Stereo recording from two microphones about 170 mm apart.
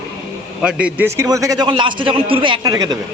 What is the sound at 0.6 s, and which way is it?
A man's voice, 5° right (ahead or behind).